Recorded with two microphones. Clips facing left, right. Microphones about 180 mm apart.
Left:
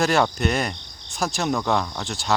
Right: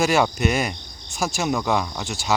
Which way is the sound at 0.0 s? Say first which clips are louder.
Right 1 dB; 5° right (ahead or behind).